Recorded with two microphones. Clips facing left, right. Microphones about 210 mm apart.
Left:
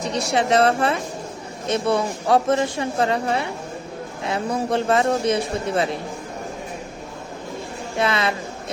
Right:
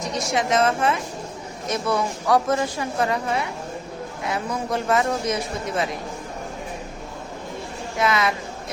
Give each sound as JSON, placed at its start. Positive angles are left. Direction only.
{"t": 0.0, "sound": "a woman's voice", "side_deg": 35}
{"t": 7.9, "sound": "a woman's voice", "side_deg": 30}